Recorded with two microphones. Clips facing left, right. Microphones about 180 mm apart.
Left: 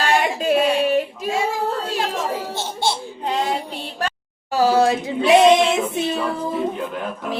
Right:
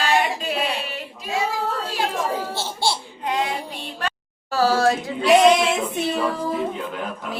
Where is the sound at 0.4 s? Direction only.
50° left (ahead or behind).